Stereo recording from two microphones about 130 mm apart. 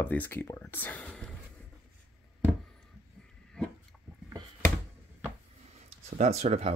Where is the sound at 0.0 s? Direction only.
15° left (ahead or behind).